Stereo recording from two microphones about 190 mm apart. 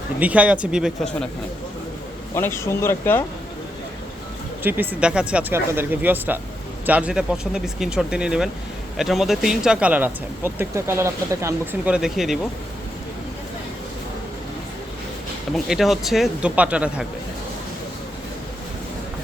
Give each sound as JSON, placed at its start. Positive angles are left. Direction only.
{"t": 0.2, "sound": "speech", "side_deg": -5}
{"t": 2.3, "sound": "speech", "side_deg": 15}
{"t": 4.6, "sound": "speech", "side_deg": -10}
{"t": 15.5, "sound": "speech", "side_deg": 0}